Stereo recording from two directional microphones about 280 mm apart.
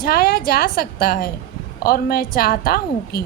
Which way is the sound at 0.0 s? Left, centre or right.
Left.